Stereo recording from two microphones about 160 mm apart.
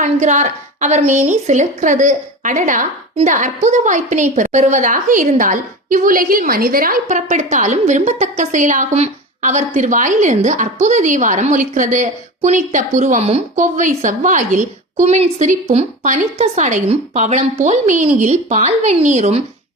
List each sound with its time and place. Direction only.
0.0 s a woman's voice: 50° right (ahead or behind)